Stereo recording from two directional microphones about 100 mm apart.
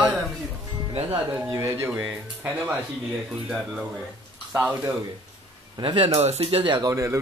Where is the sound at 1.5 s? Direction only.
30° right (ahead or behind).